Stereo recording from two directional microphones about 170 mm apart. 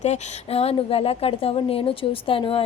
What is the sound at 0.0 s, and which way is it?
A woman's voice, 40° left (ahead or behind).